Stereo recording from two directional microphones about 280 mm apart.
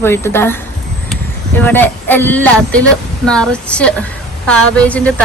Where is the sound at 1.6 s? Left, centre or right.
Centre.